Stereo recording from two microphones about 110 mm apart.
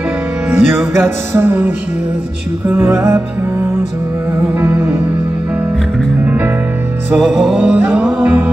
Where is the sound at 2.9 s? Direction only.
25° right (ahead or behind).